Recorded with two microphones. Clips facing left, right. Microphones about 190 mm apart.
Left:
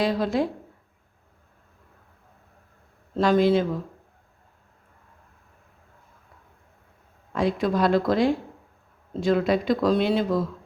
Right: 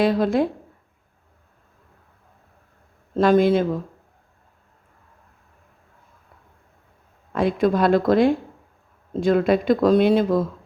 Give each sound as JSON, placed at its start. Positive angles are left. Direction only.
{"t": 0.0, "sound": "speech", "side_deg": -55}
{"t": 3.2, "sound": "speech", "side_deg": -50}
{"t": 7.3, "sound": "speech", "side_deg": -55}